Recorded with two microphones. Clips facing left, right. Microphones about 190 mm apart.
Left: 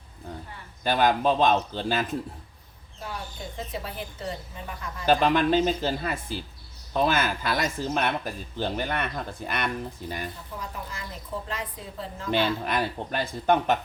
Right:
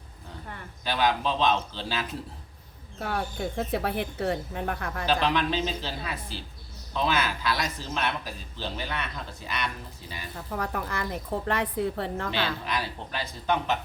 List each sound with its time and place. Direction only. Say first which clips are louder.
0.9 s speech: left 4 dB; 50° left (ahead or behind)
3.0 s speech: right 7 dB; 60° right (ahead or behind)
5.0 s speech: left 5 dB; 50° left (ahead or behind)
10.3 s speech: right 6 dB; 65° right (ahead or behind)
12.3 s speech: left 4 dB; 50° left (ahead or behind)